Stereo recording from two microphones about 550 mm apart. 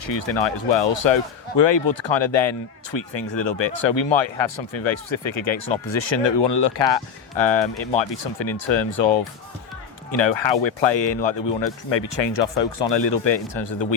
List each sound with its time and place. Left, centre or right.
0.0 s speech: left